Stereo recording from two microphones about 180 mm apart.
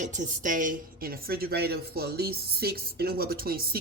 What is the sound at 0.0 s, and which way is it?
A woman's voice, 45° right (ahead or behind).